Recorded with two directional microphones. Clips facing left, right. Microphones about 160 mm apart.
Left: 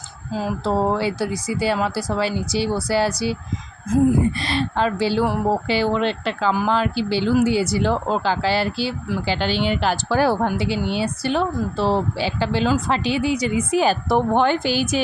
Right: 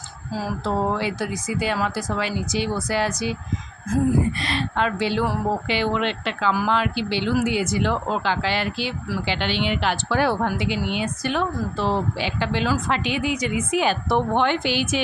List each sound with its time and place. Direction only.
0.6 s speech: 35° left (ahead or behind)